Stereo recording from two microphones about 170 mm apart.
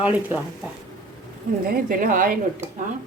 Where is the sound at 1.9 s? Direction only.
55° right (ahead or behind).